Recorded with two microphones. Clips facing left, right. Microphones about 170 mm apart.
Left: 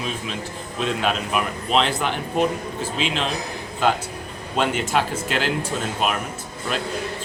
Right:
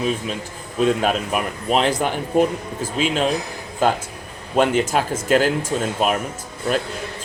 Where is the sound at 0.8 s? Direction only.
45° right (ahead or behind).